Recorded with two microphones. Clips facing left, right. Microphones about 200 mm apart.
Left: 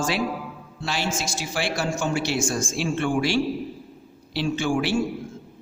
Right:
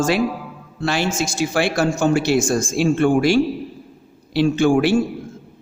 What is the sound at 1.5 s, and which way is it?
A man's voice, 50° right (ahead or behind).